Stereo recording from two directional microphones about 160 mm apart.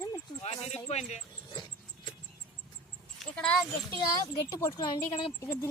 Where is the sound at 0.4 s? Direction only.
40° left (ahead or behind).